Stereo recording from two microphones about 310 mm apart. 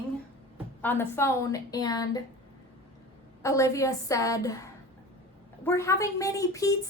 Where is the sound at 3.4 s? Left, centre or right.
Centre.